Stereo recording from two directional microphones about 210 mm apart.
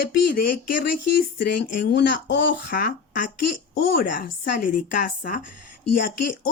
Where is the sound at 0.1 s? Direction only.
45° left (ahead or behind).